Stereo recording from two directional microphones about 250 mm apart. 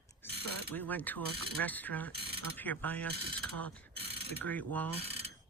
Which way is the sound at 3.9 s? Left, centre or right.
Right.